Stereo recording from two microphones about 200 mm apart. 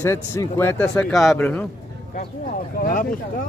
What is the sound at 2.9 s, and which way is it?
Speech, 40° left (ahead or behind).